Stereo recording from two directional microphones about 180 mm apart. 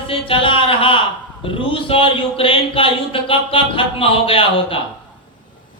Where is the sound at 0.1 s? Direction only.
30° left (ahead or behind).